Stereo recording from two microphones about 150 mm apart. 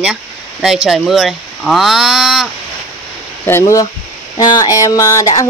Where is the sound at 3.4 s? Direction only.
15° left (ahead or behind).